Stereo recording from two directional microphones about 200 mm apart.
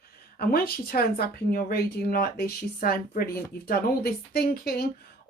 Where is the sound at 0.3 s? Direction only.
50° left (ahead or behind).